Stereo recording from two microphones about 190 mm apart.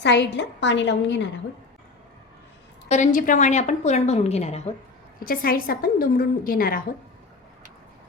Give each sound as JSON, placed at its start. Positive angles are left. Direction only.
{"t": 0.0, "sound": "a woman's voice", "side_deg": 65}
{"t": 2.9, "sound": "a woman's voice", "side_deg": 40}
{"t": 5.2, "sound": "a woman's voice", "side_deg": 50}